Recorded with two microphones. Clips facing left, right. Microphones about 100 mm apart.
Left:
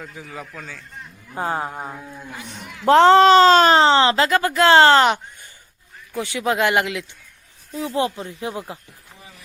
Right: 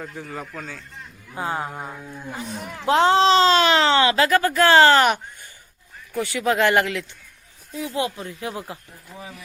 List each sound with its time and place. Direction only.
0.0 s a man's voice: centre (ahead or behind)
1.4 s speech: 35° left (ahead or behind)
1.7 s a sound: 15° left (ahead or behind)
2.8 s speech: 65° left (ahead or behind); by 7.0 s 15° left (ahead or behind)
7.7 s speech: 30° left (ahead or behind)